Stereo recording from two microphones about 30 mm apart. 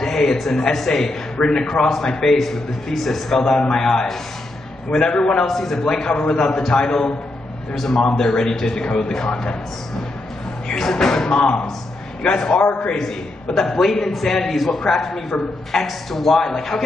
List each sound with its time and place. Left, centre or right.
0.0 s a man's voice: centre
1.4 s a man's voice: left
5.5 s a man's voice: centre
7.7 s a man's voice: centre
8.0 s a man's voice: left
10.7 s a man's voice: centre
11.3 s speech: left
12.2 s a man's voice: left
13.9 s a man's voice: centre